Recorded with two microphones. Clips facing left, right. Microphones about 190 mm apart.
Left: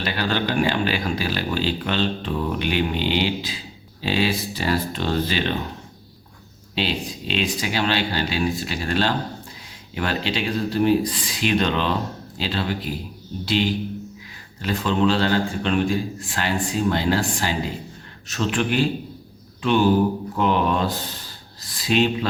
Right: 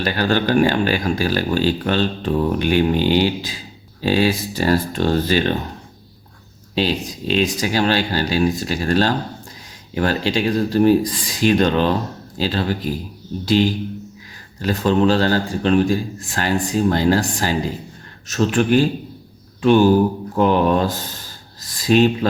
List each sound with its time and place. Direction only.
0.0 s speech: 45° right (ahead or behind)
6.7 s a man's voice: 40° right (ahead or behind)